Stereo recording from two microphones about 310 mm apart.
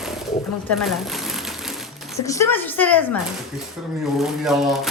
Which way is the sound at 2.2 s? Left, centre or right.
Centre.